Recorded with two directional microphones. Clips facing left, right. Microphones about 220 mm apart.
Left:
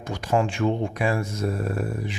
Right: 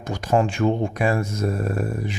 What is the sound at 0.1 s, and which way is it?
Speech, 45° right (ahead or behind).